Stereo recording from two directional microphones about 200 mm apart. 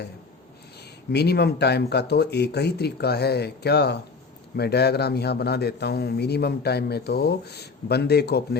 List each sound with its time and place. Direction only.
1.1 s a man's voice: 55° left (ahead or behind)